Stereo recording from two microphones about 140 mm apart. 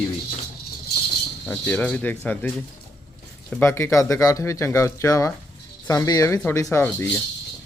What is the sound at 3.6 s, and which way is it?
Speech, 20° left (ahead or behind).